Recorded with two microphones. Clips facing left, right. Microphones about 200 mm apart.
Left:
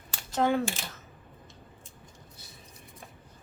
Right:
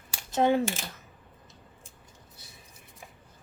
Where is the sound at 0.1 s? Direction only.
20° right (ahead or behind).